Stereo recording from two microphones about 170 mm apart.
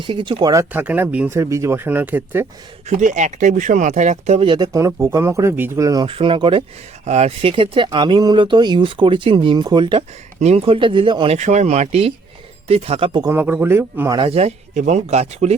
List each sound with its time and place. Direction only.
0.0 s speech: 30° right (ahead or behind); by 2.5 s 10° right (ahead or behind)
3.0 s speech: 45° right (ahead or behind); by 6.1 s 20° right (ahead or behind)
6.1 s speech: 30° right (ahead or behind)
7.0 s speech: 40° right (ahead or behind)
11.3 s speech: 45° right (ahead or behind)
13.2 s speech: 10° right (ahead or behind)
14.2 s speech: 35° right (ahead or behind)